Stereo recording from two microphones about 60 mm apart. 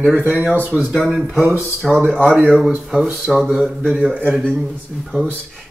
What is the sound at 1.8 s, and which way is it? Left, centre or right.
Speech, centre.